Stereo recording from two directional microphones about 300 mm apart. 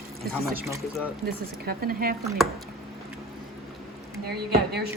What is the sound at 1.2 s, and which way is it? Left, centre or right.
Speech, right.